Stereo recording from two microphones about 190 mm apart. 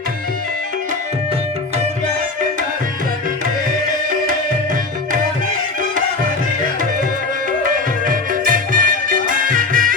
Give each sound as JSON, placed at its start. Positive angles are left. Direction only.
{"t": 8.0, "sound": "music", "side_deg": -45}